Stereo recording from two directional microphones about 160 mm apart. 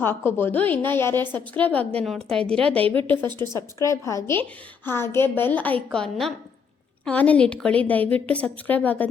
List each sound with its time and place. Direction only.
0.0 s a woman's voice: 15° left (ahead or behind)
3.4 s a woman's voice: 20° left (ahead or behind)